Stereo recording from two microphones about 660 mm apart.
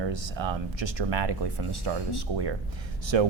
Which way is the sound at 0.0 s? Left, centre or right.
Right.